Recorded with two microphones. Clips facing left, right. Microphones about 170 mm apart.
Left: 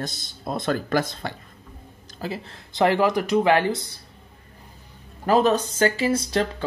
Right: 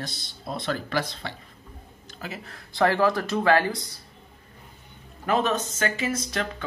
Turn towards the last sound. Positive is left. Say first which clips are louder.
# left 6 dB
turn(degrees=30)  # may be behind; listen again after turning